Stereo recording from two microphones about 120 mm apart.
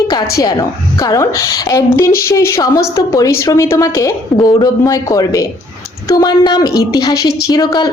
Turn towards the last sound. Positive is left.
turn(degrees=35)  # may be behind; listen again after turning